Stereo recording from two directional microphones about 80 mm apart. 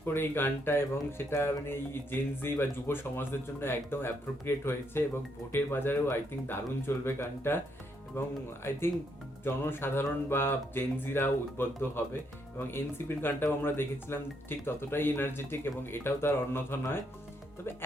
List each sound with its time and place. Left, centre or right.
0.0 s speech: left
9.4 s speech: left